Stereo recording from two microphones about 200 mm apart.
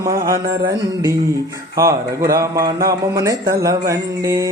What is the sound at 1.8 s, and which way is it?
Speech, 15° right (ahead or behind).